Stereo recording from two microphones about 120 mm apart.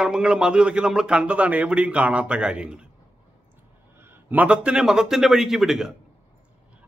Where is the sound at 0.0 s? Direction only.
5° right (ahead or behind).